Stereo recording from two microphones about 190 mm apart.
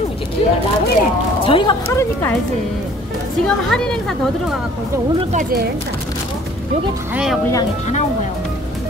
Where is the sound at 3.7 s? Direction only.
Centre (ahead or behind).